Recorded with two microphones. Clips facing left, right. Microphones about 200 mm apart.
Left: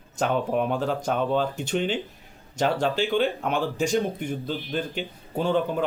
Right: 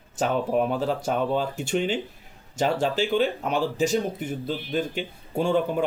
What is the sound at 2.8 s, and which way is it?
Speech, 45° right (ahead or behind).